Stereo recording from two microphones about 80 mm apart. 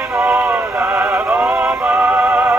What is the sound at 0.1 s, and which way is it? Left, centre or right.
Music, centre.